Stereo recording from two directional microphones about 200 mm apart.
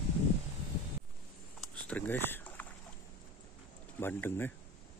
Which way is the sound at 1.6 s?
5° left (ahead or behind).